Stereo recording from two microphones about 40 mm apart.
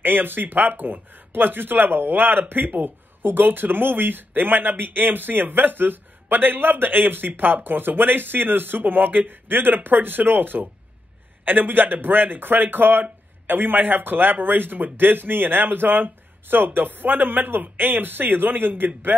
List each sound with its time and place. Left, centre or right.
0.0 s speech: right